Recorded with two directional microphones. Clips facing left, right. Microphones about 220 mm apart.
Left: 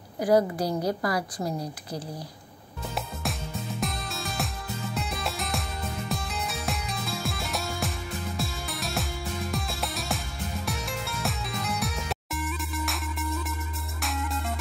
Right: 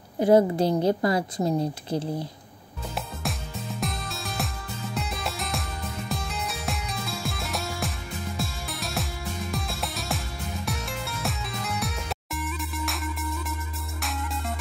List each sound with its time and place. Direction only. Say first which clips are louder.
0.2 s a woman's voice: right 4 dB; 25° right (ahead or behind)
3.8 s music: right 1 dB; centre (ahead or behind)